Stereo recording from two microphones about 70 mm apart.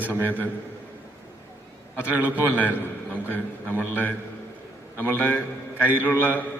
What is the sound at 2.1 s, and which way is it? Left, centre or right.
Speech, right.